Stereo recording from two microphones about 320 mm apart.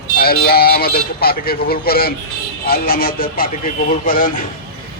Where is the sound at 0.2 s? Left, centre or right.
Left.